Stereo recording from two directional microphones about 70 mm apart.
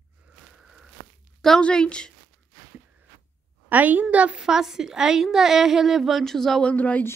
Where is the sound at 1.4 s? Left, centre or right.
Centre.